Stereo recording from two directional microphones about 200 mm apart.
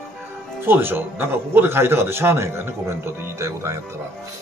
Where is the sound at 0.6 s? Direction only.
10° right (ahead or behind).